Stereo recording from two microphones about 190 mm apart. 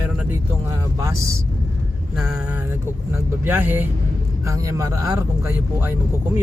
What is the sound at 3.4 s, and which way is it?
Speech, 10° right (ahead or behind).